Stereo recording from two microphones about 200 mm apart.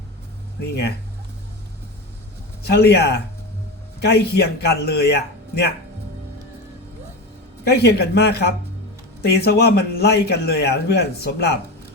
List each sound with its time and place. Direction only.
0.6 s speech: 55° left (ahead or behind)
2.6 s a man's voice: 55° left (ahead or behind)
7.6 s a man's voice: 55° left (ahead or behind)